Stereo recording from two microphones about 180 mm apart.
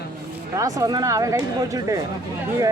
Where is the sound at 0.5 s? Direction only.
20° right (ahead or behind).